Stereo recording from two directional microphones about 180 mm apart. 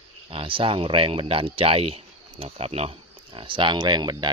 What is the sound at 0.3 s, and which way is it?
A man's voice, 30° right (ahead or behind).